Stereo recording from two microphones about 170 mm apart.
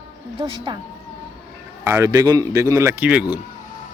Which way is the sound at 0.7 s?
30° right (ahead or behind).